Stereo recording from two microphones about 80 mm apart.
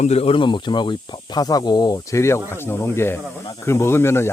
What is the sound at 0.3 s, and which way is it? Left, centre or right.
Speech, left.